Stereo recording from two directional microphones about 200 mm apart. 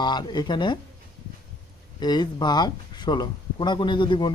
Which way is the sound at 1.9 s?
20° left (ahead or behind).